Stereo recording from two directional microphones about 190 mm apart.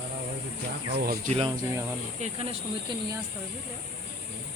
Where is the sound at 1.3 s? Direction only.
30° right (ahead or behind).